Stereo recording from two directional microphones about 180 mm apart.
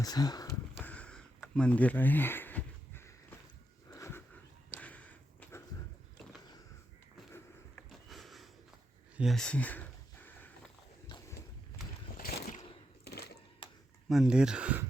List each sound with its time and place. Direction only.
0.0 s speech: 20° left (ahead or behind)
0.8 s a sound: 10° left (ahead or behind)
7.9 s sniff: centre (ahead or behind)
9.1 s a sound: centre (ahead or behind)
11.1 s horse: 25° left (ahead or behind)
12.1 s boat: 60° left (ahead or behind)
13.1 s sewing machine: 60° left (ahead or behind)
14.1 s speech: 5° right (ahead or behind)